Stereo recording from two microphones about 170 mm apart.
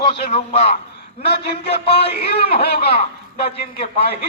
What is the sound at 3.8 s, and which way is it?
Speech, 35° left (ahead or behind).